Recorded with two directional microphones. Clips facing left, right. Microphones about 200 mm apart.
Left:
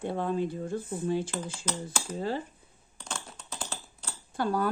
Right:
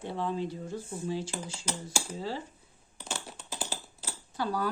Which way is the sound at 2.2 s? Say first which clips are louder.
Left 6 dB; 55° left (ahead or behind).